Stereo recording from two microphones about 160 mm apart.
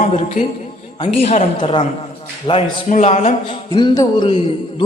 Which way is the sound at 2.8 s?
50° left (ahead or behind).